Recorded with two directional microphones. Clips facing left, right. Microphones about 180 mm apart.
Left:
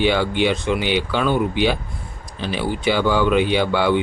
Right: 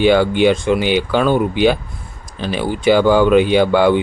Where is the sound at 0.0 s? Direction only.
45° right (ahead or behind).